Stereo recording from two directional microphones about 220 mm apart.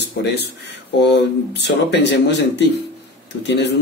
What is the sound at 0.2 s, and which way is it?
Speech, 45° left (ahead or behind).